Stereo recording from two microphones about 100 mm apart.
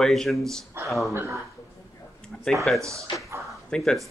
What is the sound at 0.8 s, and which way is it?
Speech, 20° right (ahead or behind).